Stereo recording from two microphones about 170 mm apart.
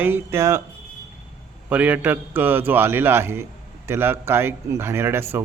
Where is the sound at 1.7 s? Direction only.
10° right (ahead or behind).